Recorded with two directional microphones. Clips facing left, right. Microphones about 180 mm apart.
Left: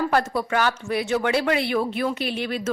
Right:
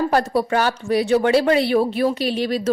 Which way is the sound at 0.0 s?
30° right (ahead or behind).